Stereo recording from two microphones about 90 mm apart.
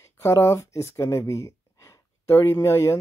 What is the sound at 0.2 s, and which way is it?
Speech, 30° left (ahead or behind).